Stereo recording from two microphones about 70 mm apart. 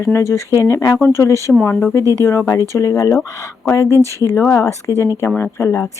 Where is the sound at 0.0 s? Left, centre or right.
Left.